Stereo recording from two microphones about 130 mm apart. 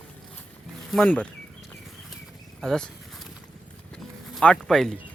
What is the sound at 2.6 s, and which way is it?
Speech, 5° left (ahead or behind).